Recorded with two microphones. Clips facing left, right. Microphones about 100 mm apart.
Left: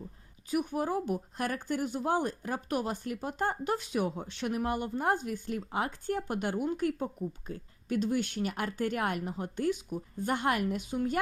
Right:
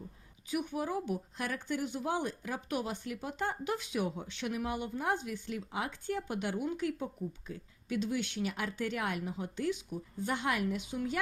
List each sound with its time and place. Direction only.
0.7 s speech: 45° left (ahead or behind)